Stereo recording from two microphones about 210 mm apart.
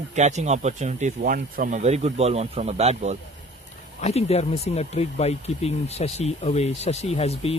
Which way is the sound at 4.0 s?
30° left (ahead or behind).